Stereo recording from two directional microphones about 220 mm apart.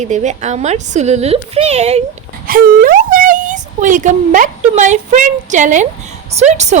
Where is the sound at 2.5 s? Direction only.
40° right (ahead or behind).